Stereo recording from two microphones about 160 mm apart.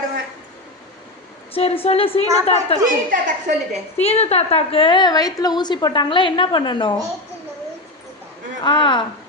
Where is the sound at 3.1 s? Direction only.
55° right (ahead or behind).